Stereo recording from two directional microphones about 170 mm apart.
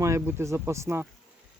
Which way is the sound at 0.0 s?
15° right (ahead or behind).